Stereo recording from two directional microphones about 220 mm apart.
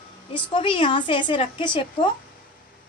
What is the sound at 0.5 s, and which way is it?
Speech, 20° left (ahead or behind).